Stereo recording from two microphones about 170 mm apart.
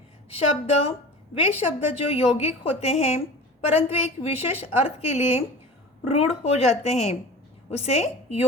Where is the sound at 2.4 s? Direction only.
40° left (ahead or behind).